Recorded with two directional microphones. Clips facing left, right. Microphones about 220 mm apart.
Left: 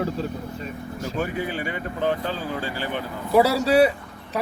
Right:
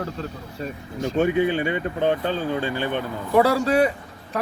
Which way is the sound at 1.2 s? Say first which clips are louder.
Right 8 dB; 25° right (ahead or behind).